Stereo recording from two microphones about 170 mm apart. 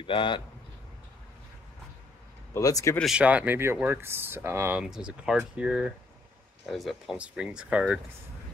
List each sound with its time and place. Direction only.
0.0 s speech: 30° left (ahead or behind)
2.5 s speech: 20° left (ahead or behind)
3.0 s speech: 5° right (ahead or behind)